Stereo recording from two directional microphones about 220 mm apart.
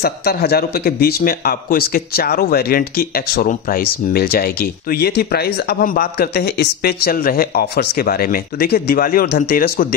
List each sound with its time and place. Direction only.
0.0 s speech: 45° left (ahead or behind)